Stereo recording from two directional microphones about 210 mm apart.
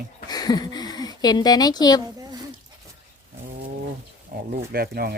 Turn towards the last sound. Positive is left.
turn(degrees=-45)  # may be behind; listen again after turning